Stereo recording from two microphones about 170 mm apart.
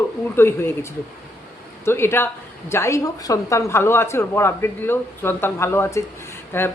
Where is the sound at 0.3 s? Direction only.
15° left (ahead or behind).